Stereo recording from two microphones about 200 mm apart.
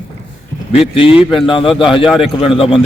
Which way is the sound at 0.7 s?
30° left (ahead or behind).